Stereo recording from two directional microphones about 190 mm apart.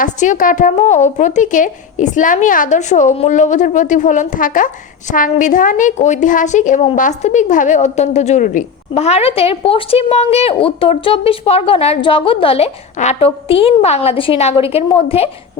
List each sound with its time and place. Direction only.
0.0 s a woman's voice: 40° left (ahead or behind)